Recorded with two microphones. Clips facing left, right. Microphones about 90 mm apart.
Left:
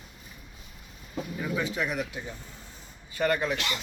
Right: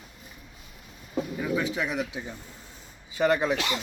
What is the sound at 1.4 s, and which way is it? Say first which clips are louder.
Speech: right 1 dB; centre (ahead or behind).